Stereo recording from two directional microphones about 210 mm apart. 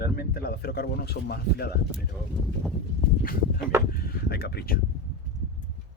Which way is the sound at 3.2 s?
45° left (ahead or behind).